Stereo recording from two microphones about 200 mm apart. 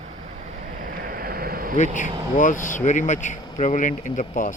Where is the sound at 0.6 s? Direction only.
40° right (ahead or behind).